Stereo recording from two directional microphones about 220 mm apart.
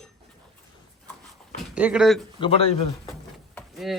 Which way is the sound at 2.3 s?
25° left (ahead or behind).